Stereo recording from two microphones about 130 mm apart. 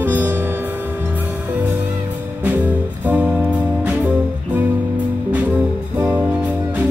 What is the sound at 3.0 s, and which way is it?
Music, 15° right (ahead or behind).